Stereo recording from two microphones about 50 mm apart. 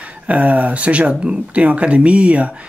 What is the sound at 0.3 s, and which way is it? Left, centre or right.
Speech, right.